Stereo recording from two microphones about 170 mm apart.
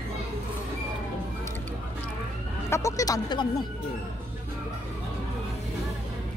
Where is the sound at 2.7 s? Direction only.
20° left (ahead or behind).